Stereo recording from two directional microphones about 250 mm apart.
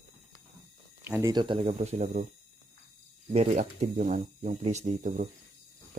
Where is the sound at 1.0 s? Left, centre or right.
Centre; by 2.2 s right.